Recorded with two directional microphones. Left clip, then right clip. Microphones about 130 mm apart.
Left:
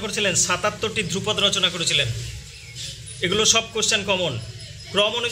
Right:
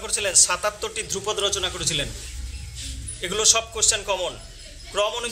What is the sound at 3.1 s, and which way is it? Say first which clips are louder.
A man's voice: left 2 dB; 30° right (ahead or behind).